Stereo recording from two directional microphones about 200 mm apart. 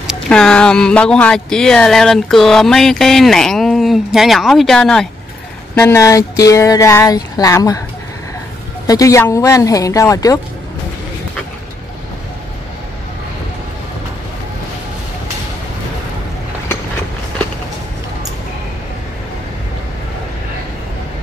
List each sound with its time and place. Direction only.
0.0 s speech: 5° left (ahead or behind)
5.8 s speech: 15° left (ahead or behind)
8.8 s speech: 15° left (ahead or behind)